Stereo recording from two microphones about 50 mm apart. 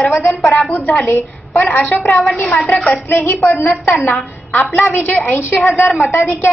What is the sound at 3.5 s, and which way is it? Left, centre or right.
A woman's voice, left.